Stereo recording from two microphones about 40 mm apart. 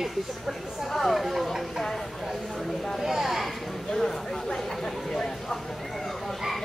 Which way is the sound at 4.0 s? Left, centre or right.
Centre.